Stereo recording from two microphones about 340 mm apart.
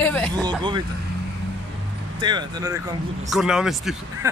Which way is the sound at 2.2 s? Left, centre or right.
Centre.